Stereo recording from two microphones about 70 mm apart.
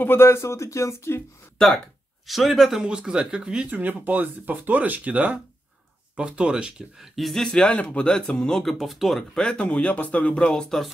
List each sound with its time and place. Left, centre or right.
0.0 s speech: left
2.2 s speech: centre
3.7 s speech: right
7.0 s speech: centre
7.5 s speech: centre
9.3 s speech: centre